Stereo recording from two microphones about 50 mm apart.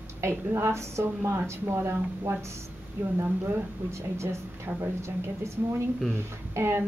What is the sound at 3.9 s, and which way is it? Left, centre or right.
A woman's voice, right.